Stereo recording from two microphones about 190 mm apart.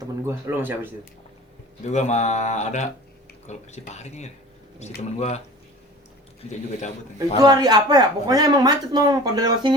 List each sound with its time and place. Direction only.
0.0 s speech: 15° right (ahead or behind)
1.8 s speech: 40° left (ahead or behind)
6.5 s speech: 40° left (ahead or behind)
7.4 s speech: 20° right (ahead or behind)